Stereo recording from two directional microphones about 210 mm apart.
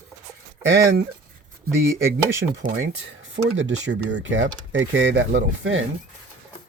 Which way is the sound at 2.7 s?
60° right (ahead or behind).